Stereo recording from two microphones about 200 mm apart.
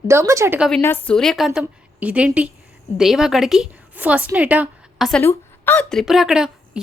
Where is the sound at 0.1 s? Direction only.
15° right (ahead or behind).